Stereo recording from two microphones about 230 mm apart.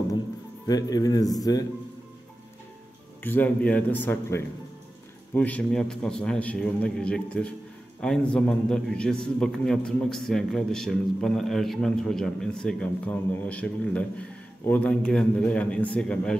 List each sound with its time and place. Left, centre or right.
0.7 s speech: centre
3.3 s a man's voice: centre